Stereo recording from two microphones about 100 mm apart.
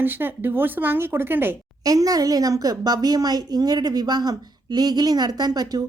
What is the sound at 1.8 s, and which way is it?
A woman's voice, 40° right (ahead or behind).